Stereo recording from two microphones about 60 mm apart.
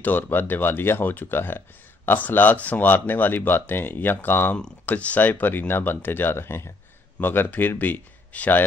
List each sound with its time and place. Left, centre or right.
0.0 s speech: left